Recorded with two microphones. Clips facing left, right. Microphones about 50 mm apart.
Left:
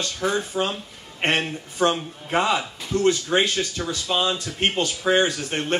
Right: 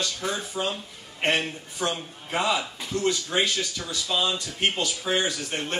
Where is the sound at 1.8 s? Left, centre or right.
Left.